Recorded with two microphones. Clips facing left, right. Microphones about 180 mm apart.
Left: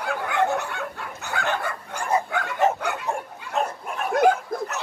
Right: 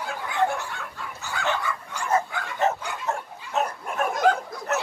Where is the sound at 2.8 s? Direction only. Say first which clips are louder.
Left 6 dB; 65° left (ahead or behind).